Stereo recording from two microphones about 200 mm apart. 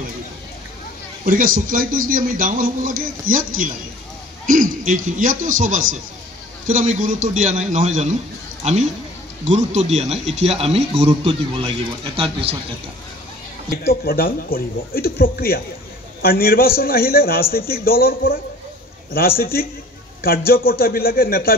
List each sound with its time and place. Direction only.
1.2 s a man's voice: 45° right (ahead or behind)
6.7 s speech: 35° right (ahead or behind)
9.5 s a man's voice: 35° right (ahead or behind)
13.8 s a man's voice: 50° left (ahead or behind)